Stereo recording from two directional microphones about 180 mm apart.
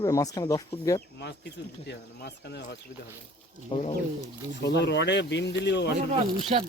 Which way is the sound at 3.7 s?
35° left (ahead or behind).